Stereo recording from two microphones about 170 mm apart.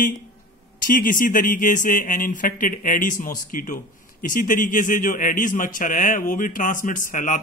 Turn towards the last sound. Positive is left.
turn(degrees=50)  # may be behind; listen again after turning